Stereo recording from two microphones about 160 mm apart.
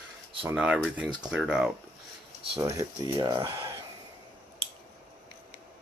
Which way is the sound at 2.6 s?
20° right (ahead or behind).